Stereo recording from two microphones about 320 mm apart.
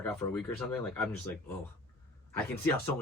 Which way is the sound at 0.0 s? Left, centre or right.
Centre.